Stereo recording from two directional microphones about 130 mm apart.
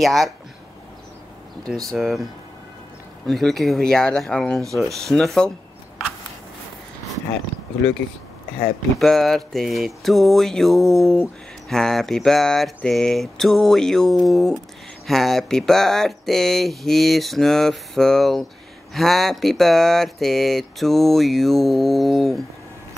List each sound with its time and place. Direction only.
0.0 s speech: centre (ahead or behind)
1.9 s speech: centre (ahead or behind)
3.3 s speech: centre (ahead or behind)
9.0 s speech: 5° left (ahead or behind)